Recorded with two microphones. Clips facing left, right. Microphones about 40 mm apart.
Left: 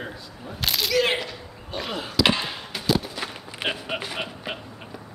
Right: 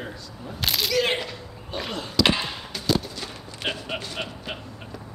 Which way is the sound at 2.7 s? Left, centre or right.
Centre.